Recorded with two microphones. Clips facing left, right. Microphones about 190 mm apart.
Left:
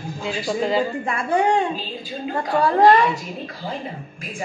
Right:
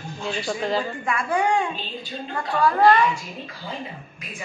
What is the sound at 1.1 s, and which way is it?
Speech, 35° left (ahead or behind).